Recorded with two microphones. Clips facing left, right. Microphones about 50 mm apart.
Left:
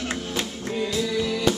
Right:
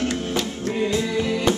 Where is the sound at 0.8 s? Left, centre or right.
Right.